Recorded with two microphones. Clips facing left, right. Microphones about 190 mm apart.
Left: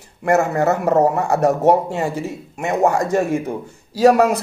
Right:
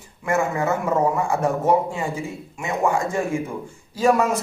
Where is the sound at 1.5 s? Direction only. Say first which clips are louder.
Left 4 dB; 70° left (ahead or behind).